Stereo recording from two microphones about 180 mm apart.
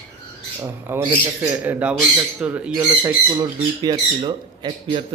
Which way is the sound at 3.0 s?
20° right (ahead or behind).